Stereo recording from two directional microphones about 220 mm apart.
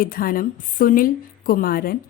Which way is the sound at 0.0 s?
40° left (ahead or behind).